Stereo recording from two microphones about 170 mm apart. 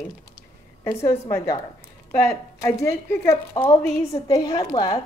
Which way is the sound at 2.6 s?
15° left (ahead or behind).